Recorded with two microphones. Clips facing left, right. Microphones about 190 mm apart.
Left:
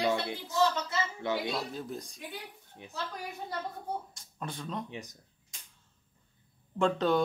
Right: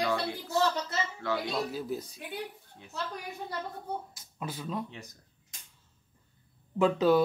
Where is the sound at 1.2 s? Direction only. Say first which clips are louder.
Even; 20° left (ahead or behind).